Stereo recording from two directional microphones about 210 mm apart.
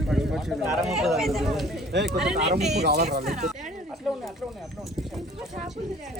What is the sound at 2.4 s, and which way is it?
Speech, 30° right (ahead or behind).